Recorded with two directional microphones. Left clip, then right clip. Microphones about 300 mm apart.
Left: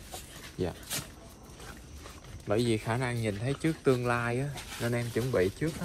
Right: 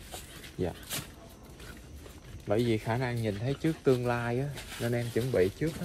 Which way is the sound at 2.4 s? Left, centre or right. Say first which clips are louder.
Even; left.